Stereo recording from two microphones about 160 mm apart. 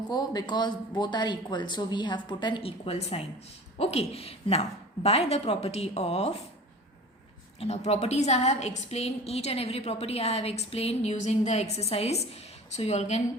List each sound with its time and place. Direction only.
0.1 s a woman's voice: 25° left (ahead or behind)
7.6 s a woman's voice: 40° left (ahead or behind)